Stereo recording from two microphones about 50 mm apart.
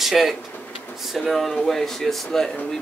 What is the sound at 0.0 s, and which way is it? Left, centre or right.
Speech, centre.